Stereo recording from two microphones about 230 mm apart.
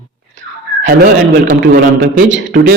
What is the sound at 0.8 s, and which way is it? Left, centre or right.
A man's voice, right.